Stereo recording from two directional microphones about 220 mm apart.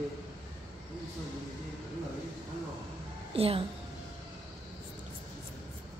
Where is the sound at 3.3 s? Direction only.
25° right (ahead or behind).